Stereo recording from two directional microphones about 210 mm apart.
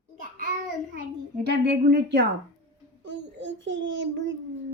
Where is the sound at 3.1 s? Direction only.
60° right (ahead or behind).